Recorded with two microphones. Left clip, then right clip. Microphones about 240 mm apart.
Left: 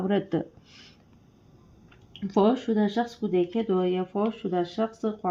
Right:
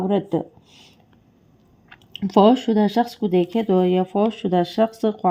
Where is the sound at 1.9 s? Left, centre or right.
Right.